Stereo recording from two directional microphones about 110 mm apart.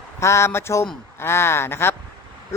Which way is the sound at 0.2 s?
25° left (ahead or behind).